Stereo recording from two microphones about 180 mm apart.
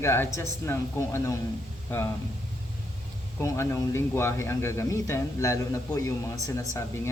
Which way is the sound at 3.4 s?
15° left (ahead or behind).